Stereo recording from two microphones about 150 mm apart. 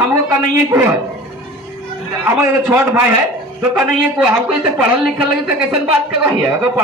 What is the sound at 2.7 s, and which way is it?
Speech, 15° right (ahead or behind).